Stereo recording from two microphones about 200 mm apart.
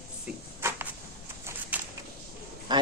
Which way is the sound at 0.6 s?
10° right (ahead or behind).